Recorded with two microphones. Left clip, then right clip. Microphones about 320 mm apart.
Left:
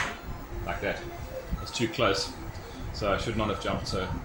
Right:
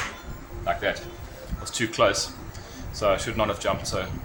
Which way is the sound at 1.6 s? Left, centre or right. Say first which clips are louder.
Right 5 dB; right.